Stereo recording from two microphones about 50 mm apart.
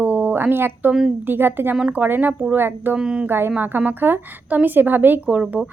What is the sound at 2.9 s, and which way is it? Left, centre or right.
Speech, centre.